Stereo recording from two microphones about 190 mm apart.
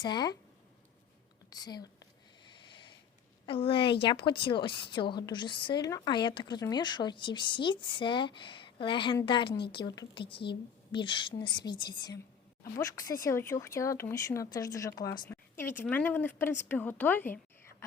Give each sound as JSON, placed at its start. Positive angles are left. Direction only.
{"t": 0.0, "sound": "a woman's voice", "side_deg": 20}
{"t": 1.5, "sound": "a woman's voice", "side_deg": 20}
{"t": 3.4, "sound": "a woman's voice", "side_deg": 30}
{"t": 9.5, "sound": "a woman's voice", "side_deg": 60}
{"t": 9.7, "sound": "a woman's voice", "side_deg": 20}